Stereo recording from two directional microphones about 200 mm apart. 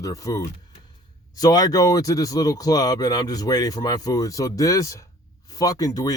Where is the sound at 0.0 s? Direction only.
15° left (ahead or behind).